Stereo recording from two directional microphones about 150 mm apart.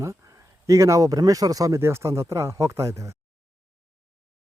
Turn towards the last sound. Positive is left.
turn(degrees=-20)  # may be behind; listen again after turning